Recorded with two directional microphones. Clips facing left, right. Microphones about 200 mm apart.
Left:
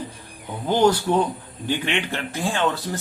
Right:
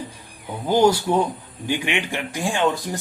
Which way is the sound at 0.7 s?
10° right (ahead or behind).